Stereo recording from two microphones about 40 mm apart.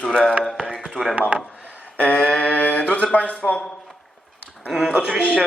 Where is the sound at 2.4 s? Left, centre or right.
Left.